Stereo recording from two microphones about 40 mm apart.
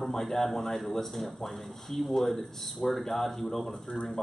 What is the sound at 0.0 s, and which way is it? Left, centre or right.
A man's voice, centre.